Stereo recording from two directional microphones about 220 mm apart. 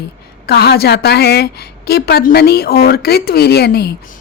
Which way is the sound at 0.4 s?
45° left (ahead or behind).